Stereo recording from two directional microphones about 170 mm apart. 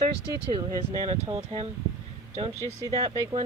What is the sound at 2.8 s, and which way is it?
Speech, 20° right (ahead or behind).